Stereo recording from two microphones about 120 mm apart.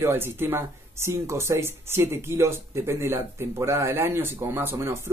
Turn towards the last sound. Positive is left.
turn(degrees=-20)  # may be behind; listen again after turning